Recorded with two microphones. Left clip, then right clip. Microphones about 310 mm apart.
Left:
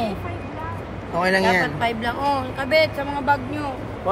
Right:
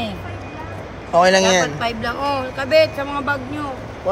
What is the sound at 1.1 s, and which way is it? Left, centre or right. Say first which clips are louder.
Speech: right 5 dB; centre.